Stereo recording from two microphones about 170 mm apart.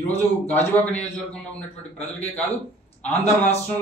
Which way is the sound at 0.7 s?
10° left (ahead or behind).